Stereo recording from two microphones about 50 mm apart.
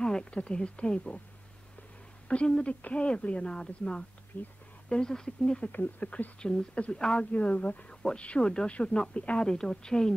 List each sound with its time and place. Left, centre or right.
0.0 s speech: centre
2.2 s speech: left
4.3 s speech: left
4.8 s speech: centre
5.7 s speech: left
9.5 s speech: centre